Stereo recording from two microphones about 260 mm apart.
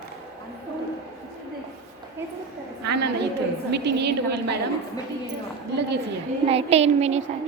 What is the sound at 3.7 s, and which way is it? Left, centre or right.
Speech, right.